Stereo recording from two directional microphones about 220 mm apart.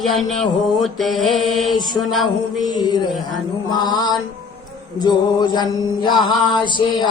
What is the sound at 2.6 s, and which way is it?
Mantra, 20° left (ahead or behind).